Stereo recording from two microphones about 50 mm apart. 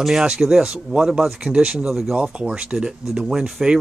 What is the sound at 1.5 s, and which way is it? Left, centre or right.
Speech, right.